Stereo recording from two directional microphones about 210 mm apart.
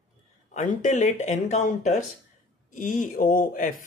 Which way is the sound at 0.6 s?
35° left (ahead or behind).